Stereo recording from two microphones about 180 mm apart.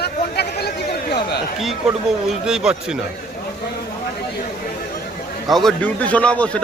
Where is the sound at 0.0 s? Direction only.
65° left (ahead or behind).